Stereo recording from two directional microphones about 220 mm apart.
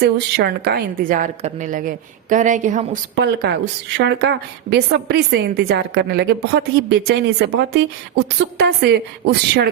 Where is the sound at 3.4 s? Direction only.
50° right (ahead or behind).